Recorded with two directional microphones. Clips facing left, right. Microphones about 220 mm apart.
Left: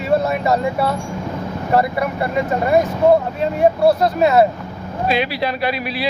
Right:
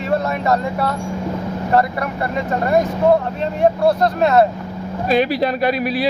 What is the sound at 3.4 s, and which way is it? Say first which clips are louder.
Speech: left 1 dB; 5° left (ahead or behind).